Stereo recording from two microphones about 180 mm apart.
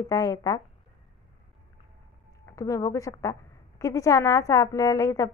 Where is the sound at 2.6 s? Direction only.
20° left (ahead or behind).